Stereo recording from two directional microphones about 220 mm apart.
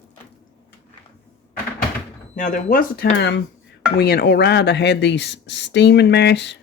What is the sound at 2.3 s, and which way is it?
Speech, 40° left (ahead or behind).